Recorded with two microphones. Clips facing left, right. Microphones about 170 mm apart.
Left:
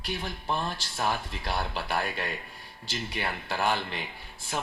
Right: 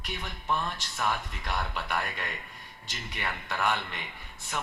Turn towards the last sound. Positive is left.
turn(degrees=30)  # may be behind; listen again after turning